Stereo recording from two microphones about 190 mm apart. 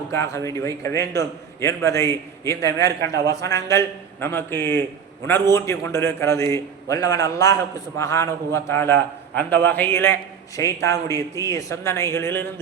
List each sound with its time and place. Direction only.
0.1 s a man's voice: 15° left (ahead or behind)